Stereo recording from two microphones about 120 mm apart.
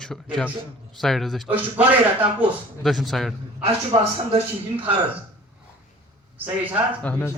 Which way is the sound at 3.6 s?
55° right (ahead or behind).